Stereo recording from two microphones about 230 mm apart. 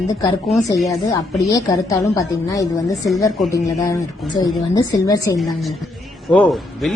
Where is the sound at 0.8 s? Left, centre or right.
Centre.